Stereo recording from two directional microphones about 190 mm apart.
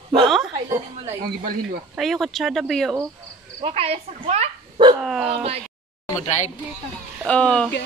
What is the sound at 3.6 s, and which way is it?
Speech, 30° right (ahead or behind).